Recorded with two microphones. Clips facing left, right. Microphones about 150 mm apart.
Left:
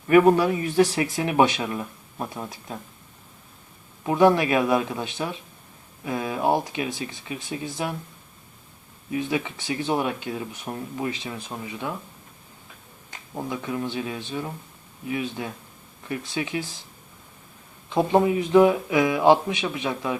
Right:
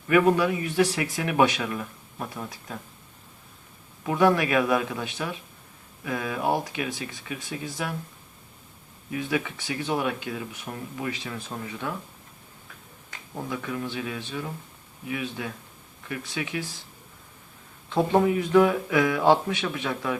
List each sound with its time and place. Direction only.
0.1 s speech: 35° left (ahead or behind)
4.0 s speech: 25° left (ahead or behind)
9.1 s speech: 25° left (ahead or behind)
13.1 s speech: 20° left (ahead or behind)
17.8 s speech: 15° left (ahead or behind)